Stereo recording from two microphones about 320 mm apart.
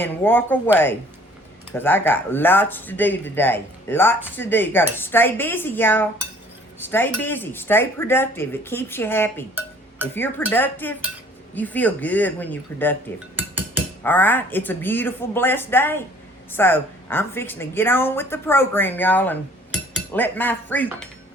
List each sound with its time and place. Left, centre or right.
0.0 s speech: centre
1.7 s speech: centre
13.3 s dishes: centre
14.0 s speech: centre